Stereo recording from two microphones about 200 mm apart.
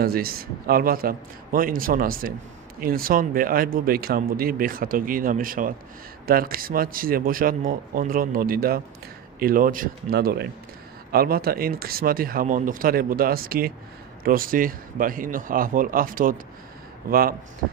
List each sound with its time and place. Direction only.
0.0 s speech: 50° right (ahead or behind)